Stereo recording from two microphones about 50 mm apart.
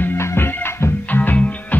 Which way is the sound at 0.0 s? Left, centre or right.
Left.